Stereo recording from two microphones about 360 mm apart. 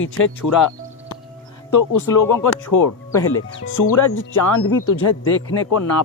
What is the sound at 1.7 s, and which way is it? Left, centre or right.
Speech, left.